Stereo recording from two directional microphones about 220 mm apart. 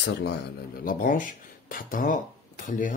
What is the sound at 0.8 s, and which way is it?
Speech, 40° left (ahead or behind).